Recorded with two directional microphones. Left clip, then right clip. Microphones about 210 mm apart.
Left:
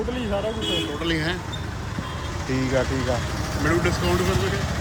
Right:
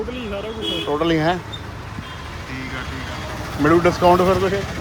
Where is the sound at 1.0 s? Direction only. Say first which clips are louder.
Right 7 dB; 15° right (ahead or behind).